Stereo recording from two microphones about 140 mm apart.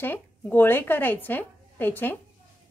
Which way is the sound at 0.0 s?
15° left (ahead or behind).